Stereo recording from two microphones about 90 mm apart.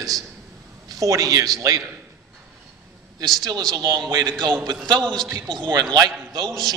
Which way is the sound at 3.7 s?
50° right (ahead or behind).